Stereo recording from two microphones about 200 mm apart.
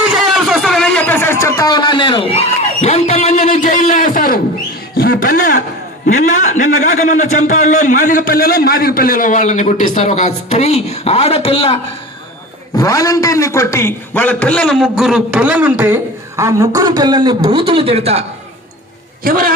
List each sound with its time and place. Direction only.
0.0 s a sound: centre (ahead or behind); by 5.5 s 45° left (ahead or behind)
6.1 s a man's voice: 40° left (ahead or behind)
12.7 s a man's voice: 15° left (ahead or behind); by 18.3 s 30° right (ahead or behind)
19.2 s a man's voice: 45° right (ahead or behind)